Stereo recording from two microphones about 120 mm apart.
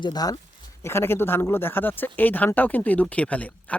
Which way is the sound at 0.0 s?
35° left (ahead or behind).